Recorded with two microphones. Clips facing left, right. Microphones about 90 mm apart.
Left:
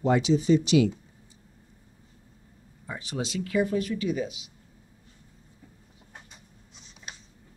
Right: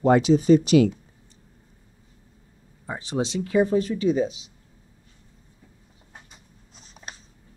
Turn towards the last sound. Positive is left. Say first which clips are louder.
# right 3 dB
turn(degrees=-40)  # may be behind; listen again after turning